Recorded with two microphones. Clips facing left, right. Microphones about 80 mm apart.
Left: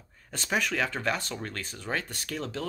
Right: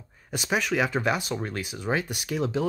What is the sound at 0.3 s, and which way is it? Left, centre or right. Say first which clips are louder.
Speech: right 3 dB; centre.